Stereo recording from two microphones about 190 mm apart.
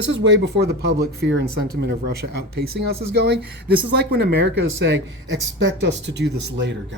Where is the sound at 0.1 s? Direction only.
70° right (ahead or behind).